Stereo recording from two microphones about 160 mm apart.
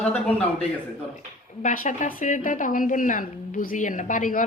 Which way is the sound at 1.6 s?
55° left (ahead or behind).